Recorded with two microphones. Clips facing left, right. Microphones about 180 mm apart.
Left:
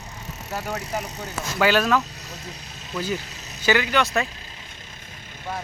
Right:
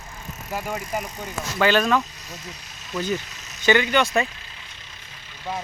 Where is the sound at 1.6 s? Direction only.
5° left (ahead or behind).